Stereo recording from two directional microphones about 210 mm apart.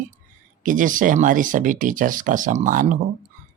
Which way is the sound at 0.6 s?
40° right (ahead or behind).